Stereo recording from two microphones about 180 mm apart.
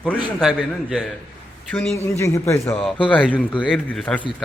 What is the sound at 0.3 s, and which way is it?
Speech, centre (ahead or behind).